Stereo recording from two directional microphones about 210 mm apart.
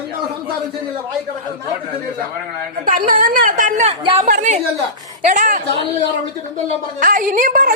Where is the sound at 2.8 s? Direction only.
40° right (ahead or behind).